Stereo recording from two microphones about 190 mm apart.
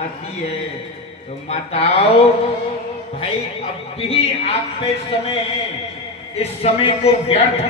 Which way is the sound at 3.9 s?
30° left (ahead or behind).